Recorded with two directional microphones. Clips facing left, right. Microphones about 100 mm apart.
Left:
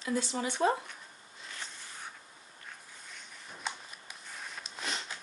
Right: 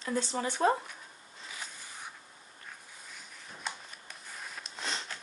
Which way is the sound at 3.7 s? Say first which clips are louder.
Left 1 dB; centre (ahead or behind).